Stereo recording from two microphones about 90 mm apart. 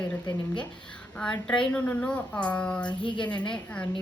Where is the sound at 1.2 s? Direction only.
10° left (ahead or behind).